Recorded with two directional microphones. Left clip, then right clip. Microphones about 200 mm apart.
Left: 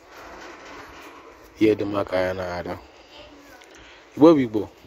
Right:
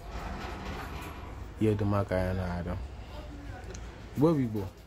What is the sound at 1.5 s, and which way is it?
Speech, 40° left (ahead or behind).